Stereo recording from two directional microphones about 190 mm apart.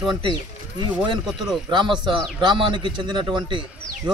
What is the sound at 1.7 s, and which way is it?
Speech, 25° right (ahead or behind).